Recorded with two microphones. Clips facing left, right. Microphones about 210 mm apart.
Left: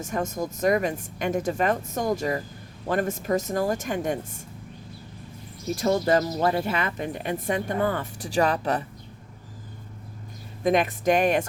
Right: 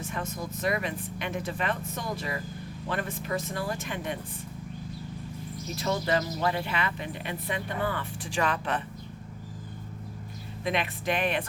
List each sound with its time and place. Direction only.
0.0 s speech: 45° left (ahead or behind)
5.7 s speech: 45° left (ahead or behind)
10.6 s speech: 45° left (ahead or behind)